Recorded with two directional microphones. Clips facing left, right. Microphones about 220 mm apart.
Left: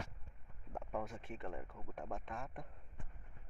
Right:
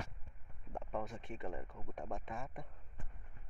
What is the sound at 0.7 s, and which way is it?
Speech, 5° left (ahead or behind).